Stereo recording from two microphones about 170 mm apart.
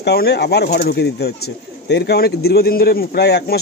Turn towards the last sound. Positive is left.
turn(degrees=75)  # may be behind; listen again after turning